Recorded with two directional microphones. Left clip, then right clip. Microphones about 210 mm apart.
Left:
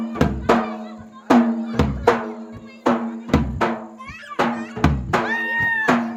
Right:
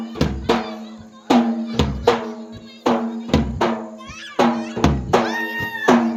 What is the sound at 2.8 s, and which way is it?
Music, 15° right (ahead or behind).